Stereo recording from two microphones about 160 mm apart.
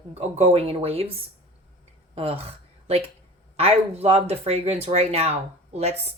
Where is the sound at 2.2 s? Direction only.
40° right (ahead or behind).